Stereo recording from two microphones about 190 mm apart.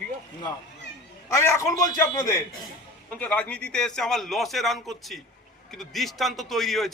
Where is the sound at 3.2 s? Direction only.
5° left (ahead or behind).